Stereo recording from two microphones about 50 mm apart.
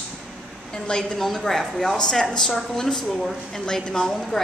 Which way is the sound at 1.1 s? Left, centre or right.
Centre.